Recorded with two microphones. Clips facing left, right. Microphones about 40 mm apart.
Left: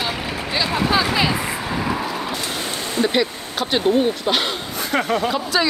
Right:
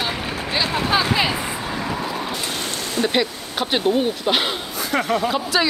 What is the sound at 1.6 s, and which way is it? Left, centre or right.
Vehicle, centre.